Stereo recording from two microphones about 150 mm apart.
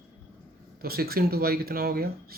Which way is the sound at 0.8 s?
90° right.